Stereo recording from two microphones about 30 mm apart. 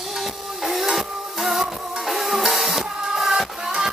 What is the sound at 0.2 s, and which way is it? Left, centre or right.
Music, centre.